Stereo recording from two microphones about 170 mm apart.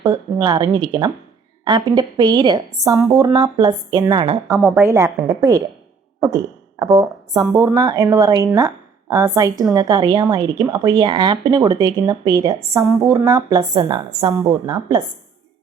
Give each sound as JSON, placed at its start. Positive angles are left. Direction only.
{"t": 0.0, "sound": "a woman's voice", "side_deg": -20}